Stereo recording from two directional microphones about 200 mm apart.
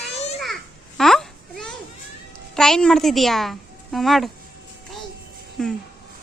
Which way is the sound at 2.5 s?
5° left (ahead or behind).